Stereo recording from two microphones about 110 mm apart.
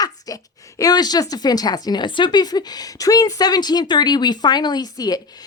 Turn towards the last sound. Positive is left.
turn(degrees=35)  # may be behind; listen again after turning